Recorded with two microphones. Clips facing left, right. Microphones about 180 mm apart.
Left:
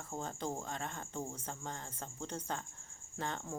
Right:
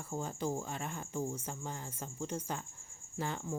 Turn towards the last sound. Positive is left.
turn(degrees=-5)  # may be behind; listen again after turning